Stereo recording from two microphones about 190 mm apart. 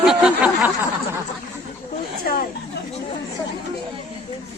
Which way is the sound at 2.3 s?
50° left (ahead or behind).